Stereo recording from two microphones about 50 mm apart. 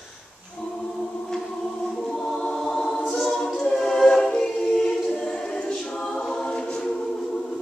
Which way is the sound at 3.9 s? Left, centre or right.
Centre.